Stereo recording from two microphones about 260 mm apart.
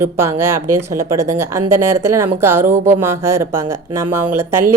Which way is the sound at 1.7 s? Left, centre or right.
Right.